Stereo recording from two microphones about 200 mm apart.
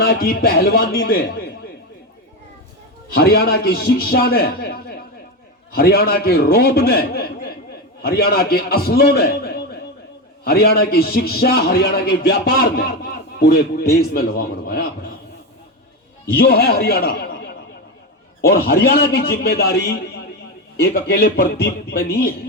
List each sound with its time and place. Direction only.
0.0 s a man's voice: 50° left (ahead or behind)
3.2 s a man's voice: 50° left (ahead or behind)
16.3 s a man's voice: 50° left (ahead or behind)